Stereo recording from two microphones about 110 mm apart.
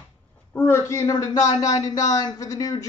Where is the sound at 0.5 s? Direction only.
25° left (ahead or behind).